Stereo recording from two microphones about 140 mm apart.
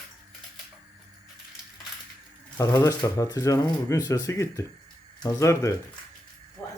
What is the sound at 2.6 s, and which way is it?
Speech, 25° left (ahead or behind).